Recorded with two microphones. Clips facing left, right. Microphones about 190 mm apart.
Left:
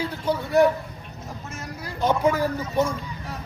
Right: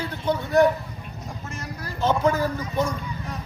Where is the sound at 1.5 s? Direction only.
Centre (ahead or behind).